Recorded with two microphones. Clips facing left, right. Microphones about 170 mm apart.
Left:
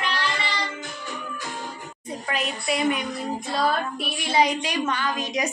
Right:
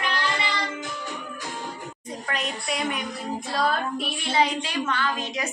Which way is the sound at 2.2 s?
5° left (ahead or behind).